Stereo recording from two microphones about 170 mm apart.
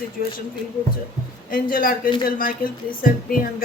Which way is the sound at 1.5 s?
55° left (ahead or behind).